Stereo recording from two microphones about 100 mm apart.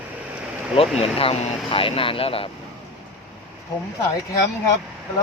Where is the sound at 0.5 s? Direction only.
10° right (ahead or behind).